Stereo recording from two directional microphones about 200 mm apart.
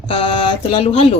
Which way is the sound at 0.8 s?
30° left (ahead or behind).